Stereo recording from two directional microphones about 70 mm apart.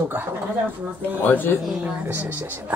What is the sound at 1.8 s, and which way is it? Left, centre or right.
Speech, right.